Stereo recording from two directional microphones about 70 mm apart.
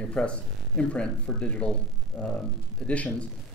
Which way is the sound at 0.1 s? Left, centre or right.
Centre.